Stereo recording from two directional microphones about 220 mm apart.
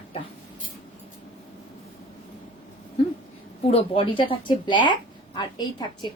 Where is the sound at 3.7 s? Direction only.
25° left (ahead or behind).